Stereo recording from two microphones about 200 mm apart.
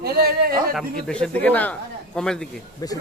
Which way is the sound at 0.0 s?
50° right (ahead or behind).